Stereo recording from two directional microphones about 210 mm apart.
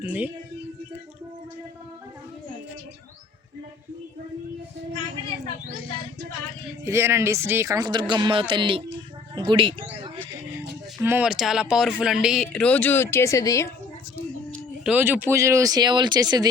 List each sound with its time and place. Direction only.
0.0 s speech: 10° right (ahead or behind)
6.8 s speech: 15° right (ahead or behind)
10.2 s a sound: 10° right (ahead or behind)
11.0 s speech: 10° right (ahead or behind); by 13.7 s 15° left (ahead or behind)
14.8 s speech: 10° right (ahead or behind)